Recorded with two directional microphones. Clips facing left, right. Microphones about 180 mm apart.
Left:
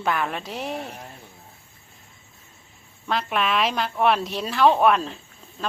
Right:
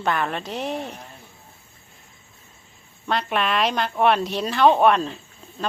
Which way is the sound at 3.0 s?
Centre (ahead or behind).